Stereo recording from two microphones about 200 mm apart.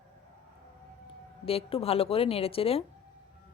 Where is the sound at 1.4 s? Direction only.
30° left (ahead or behind).